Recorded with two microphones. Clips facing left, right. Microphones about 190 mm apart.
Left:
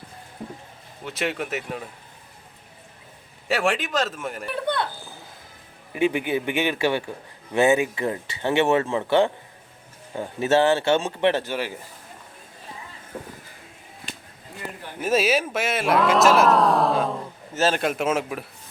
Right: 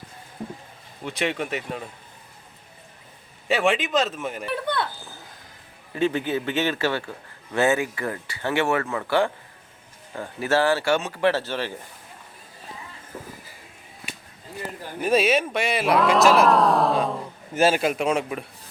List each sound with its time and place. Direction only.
1.0 s speech: centre (ahead or behind)
3.5 s speech: centre (ahead or behind)
5.9 s a man's voice: 15° left (ahead or behind)
15.0 s speech: centre (ahead or behind)
17.5 s speech: 10° right (ahead or behind)